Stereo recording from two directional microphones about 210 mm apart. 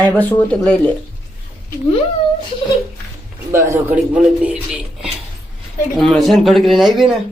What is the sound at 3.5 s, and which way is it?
Speech, 15° right (ahead or behind).